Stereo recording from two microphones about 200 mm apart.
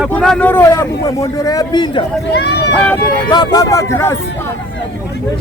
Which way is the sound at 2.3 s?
55° left (ahead or behind).